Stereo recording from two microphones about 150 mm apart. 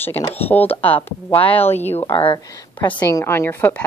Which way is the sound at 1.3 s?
40° left (ahead or behind).